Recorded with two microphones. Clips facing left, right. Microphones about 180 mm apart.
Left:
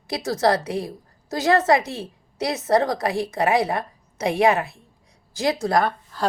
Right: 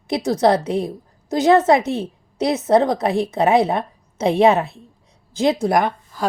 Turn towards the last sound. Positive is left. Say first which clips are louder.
# right 2 dB
turn(degrees=-15)  # may be behind; listen again after turning